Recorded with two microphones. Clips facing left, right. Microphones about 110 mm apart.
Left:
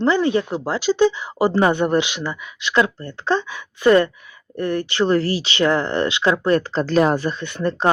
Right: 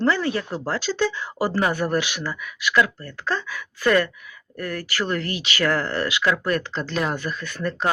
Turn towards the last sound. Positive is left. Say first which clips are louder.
# left 5 dB
turn(degrees=30)  # may be behind; listen again after turning